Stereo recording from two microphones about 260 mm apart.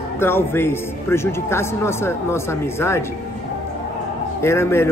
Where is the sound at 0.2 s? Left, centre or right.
Centre.